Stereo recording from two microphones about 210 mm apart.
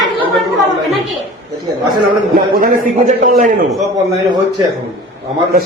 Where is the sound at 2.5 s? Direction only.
40° right (ahead or behind).